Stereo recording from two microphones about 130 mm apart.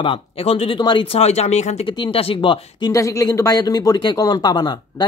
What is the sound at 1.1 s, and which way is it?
Speech, 55° left (ahead or behind).